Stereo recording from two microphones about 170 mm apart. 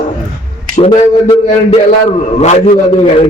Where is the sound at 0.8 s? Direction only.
35° left (ahead or behind).